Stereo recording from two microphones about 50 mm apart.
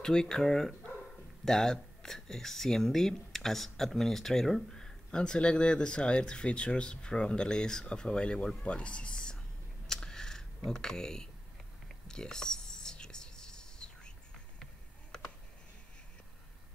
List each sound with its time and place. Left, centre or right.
0.0 s speech: centre
9.8 s computer keyboard: centre
12.1 s whispering: centre